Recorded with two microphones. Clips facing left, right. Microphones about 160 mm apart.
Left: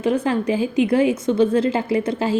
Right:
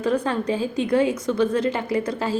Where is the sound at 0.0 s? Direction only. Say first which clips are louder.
Left 3 dB; 25° left (ahead or behind).